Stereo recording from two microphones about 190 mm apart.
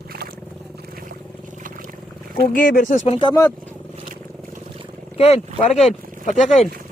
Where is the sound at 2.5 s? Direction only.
45° left (ahead or behind); by 3.4 s 25° left (ahead or behind).